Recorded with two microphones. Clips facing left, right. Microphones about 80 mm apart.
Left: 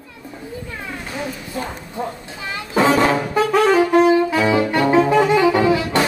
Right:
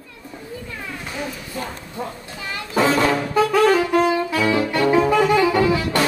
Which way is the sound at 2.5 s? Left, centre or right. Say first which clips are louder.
Left 3 dB; left.